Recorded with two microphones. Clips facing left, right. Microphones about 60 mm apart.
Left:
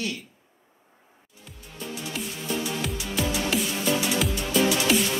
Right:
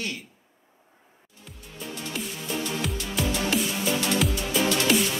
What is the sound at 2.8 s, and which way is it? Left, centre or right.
Music, centre.